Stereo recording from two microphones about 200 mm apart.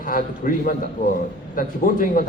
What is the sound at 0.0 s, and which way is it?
Speech, 45° left (ahead or behind).